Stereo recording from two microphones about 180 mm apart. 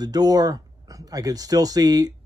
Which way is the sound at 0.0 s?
20° right (ahead or behind).